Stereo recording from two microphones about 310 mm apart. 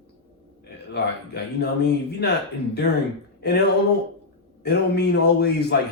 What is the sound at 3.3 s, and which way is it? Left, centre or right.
Speech, left.